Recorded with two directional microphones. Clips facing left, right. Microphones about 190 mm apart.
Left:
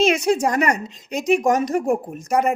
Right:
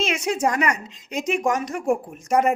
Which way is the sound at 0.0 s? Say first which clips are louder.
Left 7 dB; 40° left (ahead or behind).